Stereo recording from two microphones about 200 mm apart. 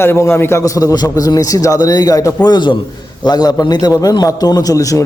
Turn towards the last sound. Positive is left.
turn(degrees=15)  # may be behind; listen again after turning